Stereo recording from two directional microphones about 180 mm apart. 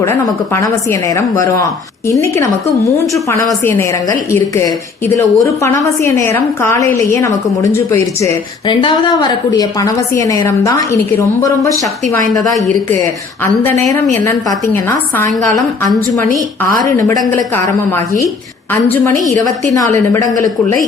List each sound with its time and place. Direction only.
0.0 s a woman's voice: 15° left (ahead or behind)
16.6 s a woman's voice: 15° left (ahead or behind)
18.7 s a woman's voice: 10° left (ahead or behind)